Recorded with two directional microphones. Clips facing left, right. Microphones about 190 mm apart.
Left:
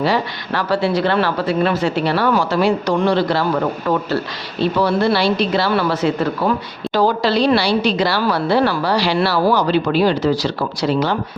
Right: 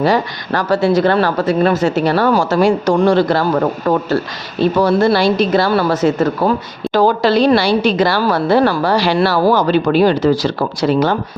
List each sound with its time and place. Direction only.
0.0 s a woman's voice: 45° right (ahead or behind)